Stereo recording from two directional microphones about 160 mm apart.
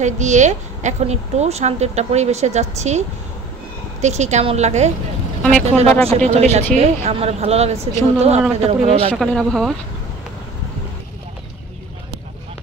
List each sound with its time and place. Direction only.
0.0 s a woman's voice: 50° right (ahead or behind)
4.0 s a woman's voice: 45° right (ahead or behind)
9.1 s speech: centre (ahead or behind)